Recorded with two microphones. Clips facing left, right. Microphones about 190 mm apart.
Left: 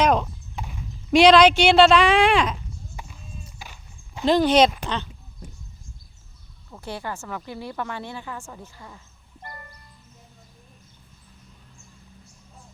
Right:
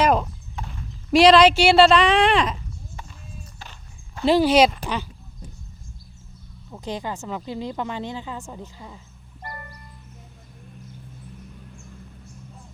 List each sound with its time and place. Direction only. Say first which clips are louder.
0.0 s clip-clop: even; 5° right (ahead or behind)
0.5 s horse: left 1 dB; 10° left (ahead or behind)
1.1 s speech: even; centre (ahead or behind)
2.9 s run: even; 10° left (ahead or behind)
3.6 s walk: even; 10° left (ahead or behind)
4.3 s speech: right 1 dB; 5° right (ahead or behind)
6.7 s speech: right 3 dB; 15° right (ahead or behind)